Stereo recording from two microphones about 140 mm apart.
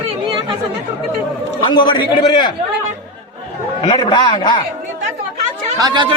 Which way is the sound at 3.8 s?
30° left (ahead or behind).